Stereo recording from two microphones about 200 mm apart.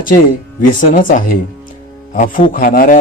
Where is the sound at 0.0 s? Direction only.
45° left (ahead or behind).